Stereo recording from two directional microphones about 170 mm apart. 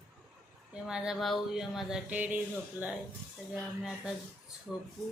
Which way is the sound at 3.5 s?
5° right (ahead or behind).